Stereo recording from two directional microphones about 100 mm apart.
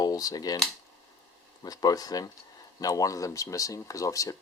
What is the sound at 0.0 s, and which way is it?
Speech, 40° left (ahead or behind).